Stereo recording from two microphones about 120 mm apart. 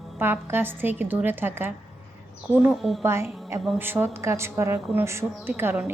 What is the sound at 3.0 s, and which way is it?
A woman's voice, 20° right (ahead or behind).